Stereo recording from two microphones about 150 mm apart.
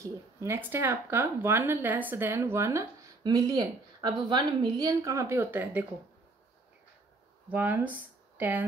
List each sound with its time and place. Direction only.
0.0 s speech: 20° right (ahead or behind)
7.4 s speech: 15° right (ahead or behind)